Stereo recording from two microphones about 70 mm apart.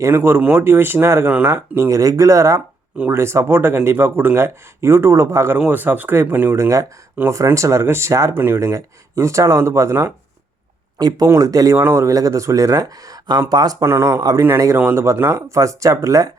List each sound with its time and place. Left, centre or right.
0.0 s speech: right
3.1 s speech: right
5.5 s speech: right
6.6 s speech: right
8.3 s speech: right
8.6 s speech: right
10.9 s speech: right
11.3 s speech: right
11.8 s speech: right
12.0 s speech: right
13.8 s speech: right
14.2 s speech: right
14.9 s speech: right